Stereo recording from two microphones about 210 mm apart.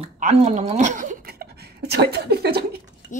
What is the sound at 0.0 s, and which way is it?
A woman's voice, 30° right (ahead or behind).